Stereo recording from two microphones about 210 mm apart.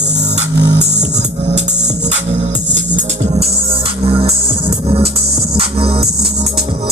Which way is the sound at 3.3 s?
30° right (ahead or behind).